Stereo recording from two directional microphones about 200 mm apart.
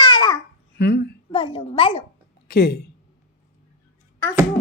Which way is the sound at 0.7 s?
55° left (ahead or behind).